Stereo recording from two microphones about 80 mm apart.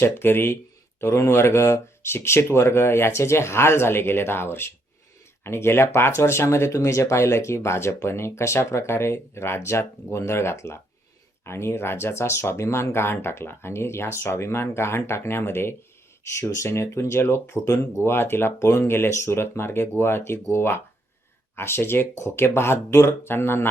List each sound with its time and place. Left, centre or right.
0.0 s speech: left
6.7 s speech: left